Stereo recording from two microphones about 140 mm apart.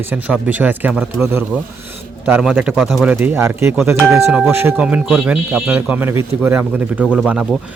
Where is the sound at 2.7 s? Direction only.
Centre (ahead or behind).